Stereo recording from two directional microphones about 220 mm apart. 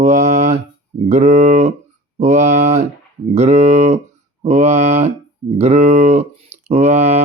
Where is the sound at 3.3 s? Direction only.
30° right (ahead or behind).